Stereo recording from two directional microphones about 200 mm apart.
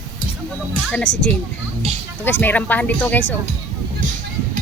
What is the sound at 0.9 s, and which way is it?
Speech, 5° left (ahead or behind).